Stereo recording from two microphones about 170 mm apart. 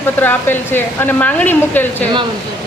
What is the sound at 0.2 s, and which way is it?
A woman's voice, 10° left (ahead or behind).